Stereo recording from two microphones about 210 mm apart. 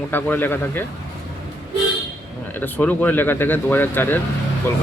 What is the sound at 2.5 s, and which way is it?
Speech, 10° left (ahead or behind).